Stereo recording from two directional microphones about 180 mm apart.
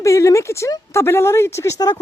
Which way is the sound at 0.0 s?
15° left (ahead or behind).